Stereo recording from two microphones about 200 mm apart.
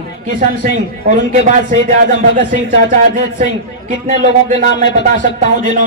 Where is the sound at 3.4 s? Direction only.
40° right (ahead or behind).